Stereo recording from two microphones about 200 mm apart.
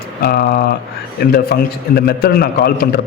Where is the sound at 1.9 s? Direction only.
50° left (ahead or behind).